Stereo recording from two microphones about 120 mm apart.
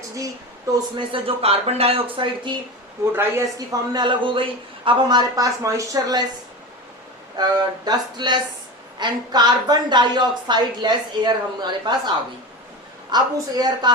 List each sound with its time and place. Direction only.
0.9 s speech: 50° right (ahead or behind)
3.1 s a man's voice: 20° right (ahead or behind)
3.9 s a woman's voice: 40° right (ahead or behind)
7.3 s a woman's voice: 35° right (ahead or behind)